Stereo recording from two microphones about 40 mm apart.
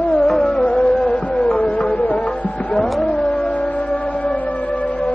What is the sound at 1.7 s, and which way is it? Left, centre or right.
Music, left.